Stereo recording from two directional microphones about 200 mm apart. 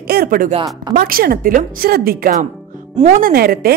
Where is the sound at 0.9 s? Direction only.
45° right (ahead or behind).